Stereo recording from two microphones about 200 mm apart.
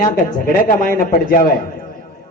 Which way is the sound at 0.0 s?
40° left (ahead or behind).